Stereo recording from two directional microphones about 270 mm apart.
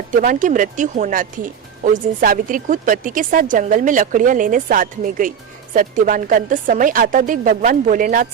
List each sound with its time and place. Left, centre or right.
0.2 s speech: right